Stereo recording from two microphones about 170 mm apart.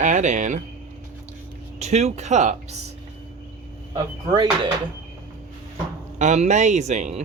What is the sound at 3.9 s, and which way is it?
Speech, 25° right (ahead or behind).